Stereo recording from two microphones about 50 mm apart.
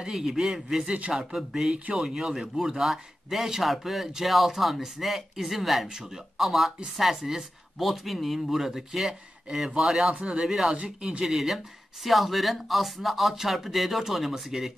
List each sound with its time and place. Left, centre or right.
0.0 s a man's voice: centre
10.1 s a man's voice: centre
11.2 s speech: centre